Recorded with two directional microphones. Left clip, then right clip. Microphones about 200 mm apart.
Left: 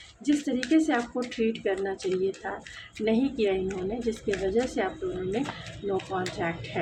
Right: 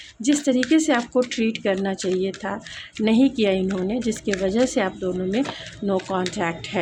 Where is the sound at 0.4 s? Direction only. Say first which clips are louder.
Right 7 dB; 55° right (ahead or behind).